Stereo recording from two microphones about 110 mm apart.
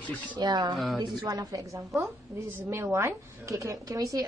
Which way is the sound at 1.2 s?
35° right (ahead or behind).